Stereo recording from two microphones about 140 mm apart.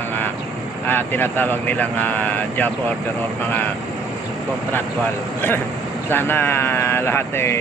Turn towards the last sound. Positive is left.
turn(degrees=15)  # may be behind; listen again after turning